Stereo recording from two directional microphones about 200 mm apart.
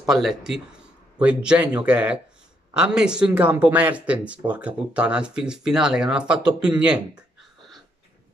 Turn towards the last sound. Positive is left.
turn(degrees=-5)  # may be behind; listen again after turning